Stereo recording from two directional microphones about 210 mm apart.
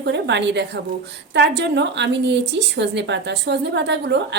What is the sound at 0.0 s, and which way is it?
A woman's voice, 55° right (ahead or behind).